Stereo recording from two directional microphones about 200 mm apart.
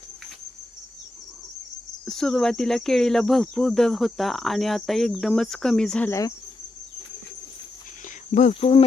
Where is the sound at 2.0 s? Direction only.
5° left (ahead or behind).